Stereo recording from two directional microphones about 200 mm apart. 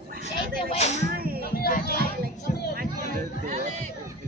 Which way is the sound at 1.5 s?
50° left (ahead or behind).